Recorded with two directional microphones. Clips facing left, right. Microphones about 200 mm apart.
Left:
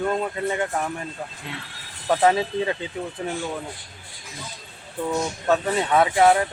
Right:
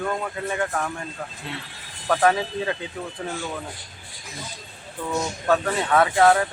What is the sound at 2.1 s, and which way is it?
Speech, 20° left (ahead or behind).